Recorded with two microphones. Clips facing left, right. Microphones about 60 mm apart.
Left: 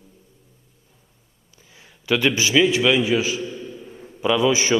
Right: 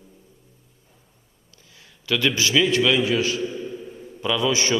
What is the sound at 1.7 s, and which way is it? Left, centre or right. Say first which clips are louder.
A man's voice: left 3 dB; left.